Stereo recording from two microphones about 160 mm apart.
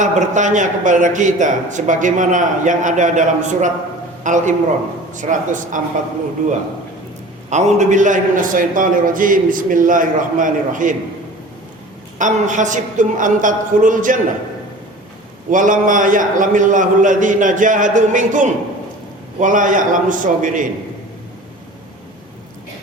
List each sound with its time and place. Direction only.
0.0 s a man's voice: 50° right (ahead or behind)
12.2 s a man's voice: 50° right (ahead or behind)
15.4 s a man's voice: 55° right (ahead or behind)